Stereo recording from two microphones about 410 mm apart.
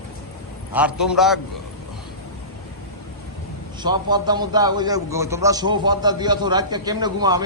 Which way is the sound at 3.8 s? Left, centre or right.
Centre.